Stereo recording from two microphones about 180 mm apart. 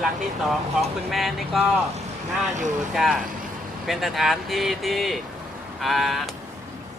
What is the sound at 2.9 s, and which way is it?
Speech, centre (ahead or behind).